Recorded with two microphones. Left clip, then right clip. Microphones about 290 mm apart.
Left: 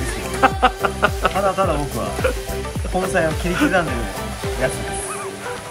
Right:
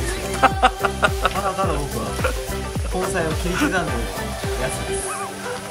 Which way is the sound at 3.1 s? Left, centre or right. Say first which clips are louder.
Left 5 dB; centre.